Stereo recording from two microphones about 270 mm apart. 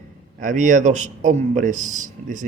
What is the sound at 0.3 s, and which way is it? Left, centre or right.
Speech, right.